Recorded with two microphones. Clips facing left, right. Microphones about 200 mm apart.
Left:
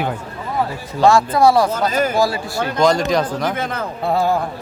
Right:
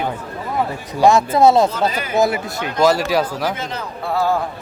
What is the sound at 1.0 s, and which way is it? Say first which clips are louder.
Speech: right 1 dB; 20° right (ahead or behind).